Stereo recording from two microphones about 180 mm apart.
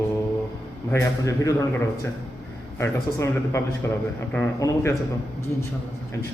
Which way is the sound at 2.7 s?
15° left (ahead or behind).